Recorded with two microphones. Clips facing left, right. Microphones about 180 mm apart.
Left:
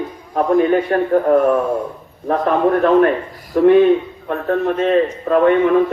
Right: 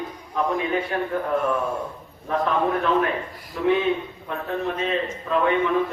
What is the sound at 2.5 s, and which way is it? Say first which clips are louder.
A man's voice: left 9 dB; 50° left (ahead or behind).